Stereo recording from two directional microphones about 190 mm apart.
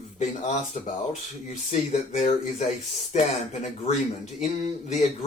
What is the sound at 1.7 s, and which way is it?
Speech, 35° left (ahead or behind).